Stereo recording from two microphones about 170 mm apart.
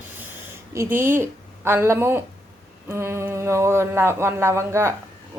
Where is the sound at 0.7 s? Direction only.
15° right (ahead or behind).